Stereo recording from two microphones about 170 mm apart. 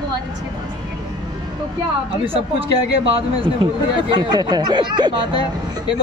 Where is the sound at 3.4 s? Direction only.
30° right (ahead or behind).